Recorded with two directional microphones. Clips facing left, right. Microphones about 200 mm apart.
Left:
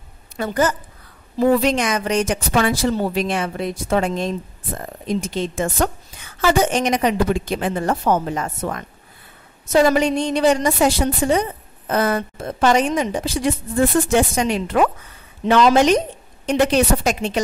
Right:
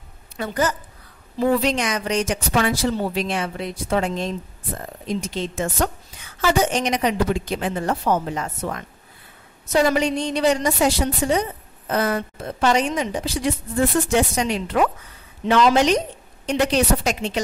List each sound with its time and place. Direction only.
0.4 s a woman's voice: 50° left (ahead or behind)